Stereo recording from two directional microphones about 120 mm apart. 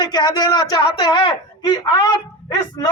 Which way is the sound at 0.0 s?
35° left (ahead or behind).